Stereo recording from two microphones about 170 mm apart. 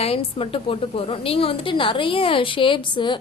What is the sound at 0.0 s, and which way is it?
A woman's voice, 35° left (ahead or behind).